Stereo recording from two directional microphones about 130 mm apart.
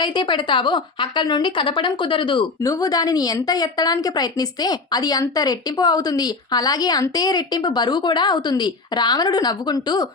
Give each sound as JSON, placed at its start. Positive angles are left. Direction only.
{"t": 0.0, "sound": "a woman's voice", "side_deg": 35}
{"t": 2.6, "sound": "a woman's voice", "side_deg": 25}